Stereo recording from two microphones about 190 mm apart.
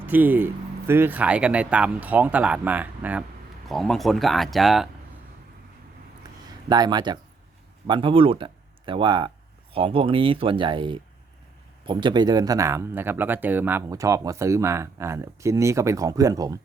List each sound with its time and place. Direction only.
0.0 s speech: 10° right (ahead or behind)
6.7 s speech: 20° right (ahead or behind)